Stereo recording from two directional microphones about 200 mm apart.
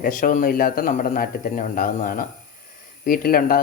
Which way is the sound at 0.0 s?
40° left (ahead or behind).